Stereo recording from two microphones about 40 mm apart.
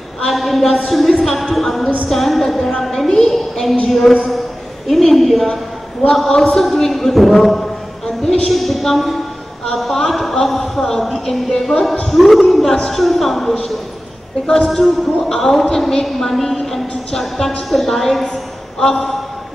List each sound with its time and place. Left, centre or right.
0.3 s a woman's voice: centre
9.8 s a sound: centre
10.3 s a woman's voice: centre
11.1 s a woman's voice: centre
14.4 s a woman's voice: centre
14.7 s a woman's voice: centre